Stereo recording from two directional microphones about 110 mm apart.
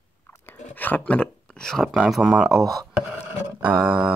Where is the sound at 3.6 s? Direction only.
10° right (ahead or behind).